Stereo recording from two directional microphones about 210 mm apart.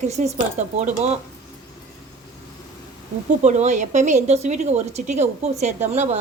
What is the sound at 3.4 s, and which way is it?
A woman's voice, 35° right (ahead or behind).